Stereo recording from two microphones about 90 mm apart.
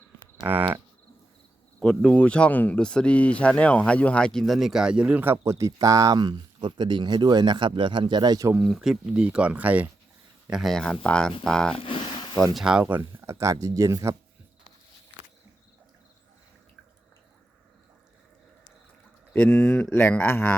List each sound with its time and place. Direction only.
2.0 s speech: 15° left (ahead or behind); by 5.2 s 10° right (ahead or behind)
5.5 s speech: 35° right (ahead or behind)
8.5 s speech: 5° right (ahead or behind)
10.5 s speech: centre (ahead or behind)
11.8 s a sound: 75° left (ahead or behind)
12.5 s speech: 5° right (ahead or behind)
12.8 s speech: 25° right (ahead or behind)
19.3 s speech: 20° left (ahead or behind)
19.9 s speech: 25° left (ahead or behind)